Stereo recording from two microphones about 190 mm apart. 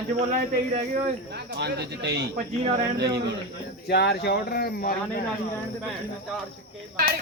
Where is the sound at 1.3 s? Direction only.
60° right (ahead or behind).